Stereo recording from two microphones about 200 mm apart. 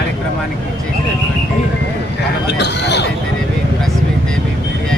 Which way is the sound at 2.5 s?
60° left (ahead or behind).